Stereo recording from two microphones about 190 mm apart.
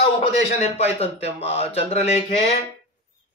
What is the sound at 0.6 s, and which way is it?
Speech, 35° left (ahead or behind).